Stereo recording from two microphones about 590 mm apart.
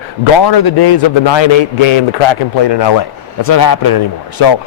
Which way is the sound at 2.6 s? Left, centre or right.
Left.